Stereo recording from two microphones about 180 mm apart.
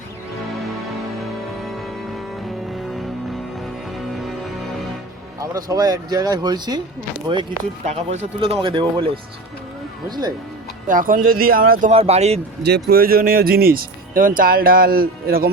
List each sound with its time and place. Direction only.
2.7 s music: centre (ahead or behind)
5.4 s speech: 20° right (ahead or behind)
7.9 s speech: 35° right (ahead or behind)
10.1 s speech: 20° right (ahead or behind)
10.8 s speech: 50° right (ahead or behind)
11.9 s speech: 35° right (ahead or behind)
12.6 s speech: 60° right (ahead or behind)